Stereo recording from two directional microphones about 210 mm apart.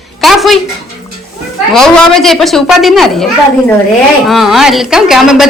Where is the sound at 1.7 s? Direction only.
Centre (ahead or behind).